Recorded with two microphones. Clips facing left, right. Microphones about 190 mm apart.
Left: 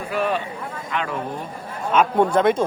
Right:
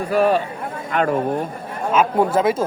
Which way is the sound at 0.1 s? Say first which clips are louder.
Right 6 dB; 40° right (ahead or behind).